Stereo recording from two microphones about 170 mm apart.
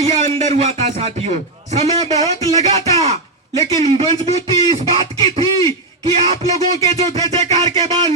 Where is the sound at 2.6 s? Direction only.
40° right (ahead or behind).